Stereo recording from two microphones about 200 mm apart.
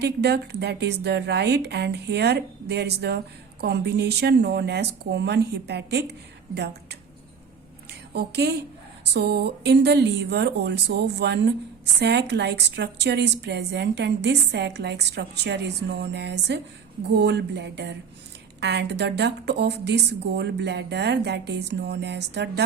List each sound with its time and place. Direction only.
0.0 s a woman's voice: 55° right (ahead or behind)
8.1 s a woman's voice: 55° right (ahead or behind)